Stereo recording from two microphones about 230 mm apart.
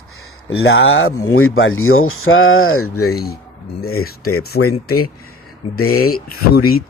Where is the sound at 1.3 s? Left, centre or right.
Left.